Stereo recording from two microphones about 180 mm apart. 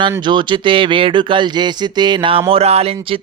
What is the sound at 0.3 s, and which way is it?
Speech, 25° right (ahead or behind).